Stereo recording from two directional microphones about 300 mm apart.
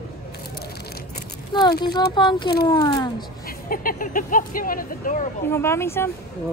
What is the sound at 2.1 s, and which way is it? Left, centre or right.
Speech, centre.